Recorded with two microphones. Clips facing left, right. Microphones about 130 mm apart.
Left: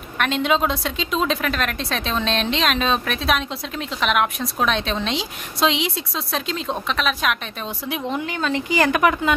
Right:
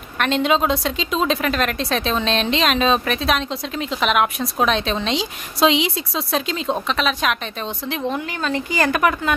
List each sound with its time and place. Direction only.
0.2 s a woman's voice: centre (ahead or behind); by 9.3 s 15° left (ahead or behind)